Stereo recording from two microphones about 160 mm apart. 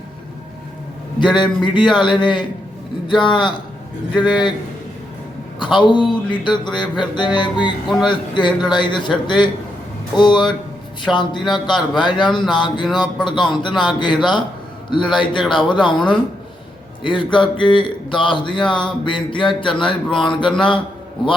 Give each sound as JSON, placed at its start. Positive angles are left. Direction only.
{"t": 1.2, "sound": "a man's voice", "side_deg": 30}
{"t": 4.1, "sound": "a man's voice", "side_deg": -5}
{"t": 5.5, "sound": "a man's voice", "side_deg": 30}
{"t": 17.0, "sound": "a man's voice", "side_deg": 30}